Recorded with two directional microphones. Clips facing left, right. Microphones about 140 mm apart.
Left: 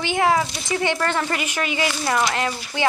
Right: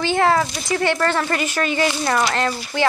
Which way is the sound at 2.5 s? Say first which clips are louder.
Right 4 dB; 35° right (ahead or behind).